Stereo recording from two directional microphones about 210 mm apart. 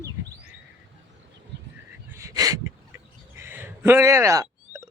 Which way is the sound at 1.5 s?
55° right (ahead or behind).